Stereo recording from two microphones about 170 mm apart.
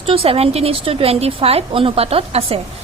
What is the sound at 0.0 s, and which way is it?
A woman's voice, 35° right (ahead or behind).